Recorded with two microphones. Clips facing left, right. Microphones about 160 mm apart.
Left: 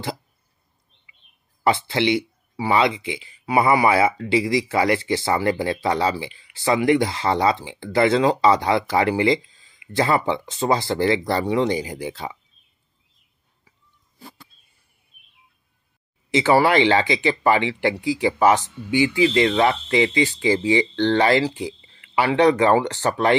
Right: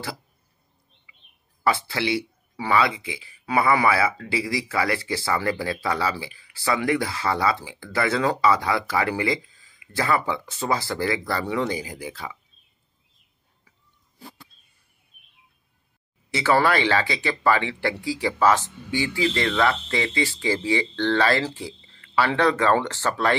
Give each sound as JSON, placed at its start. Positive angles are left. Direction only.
{"t": 1.6, "sound": "speech", "side_deg": 20}
{"t": 16.3, "sound": "speech", "side_deg": 20}